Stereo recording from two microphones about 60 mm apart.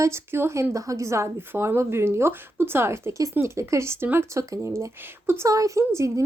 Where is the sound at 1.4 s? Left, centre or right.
Right.